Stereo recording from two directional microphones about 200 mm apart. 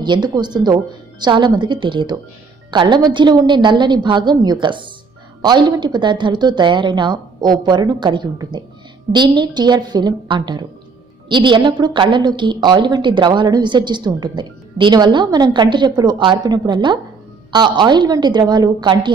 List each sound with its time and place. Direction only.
0.0 s a woman's voice: 20° right (ahead or behind)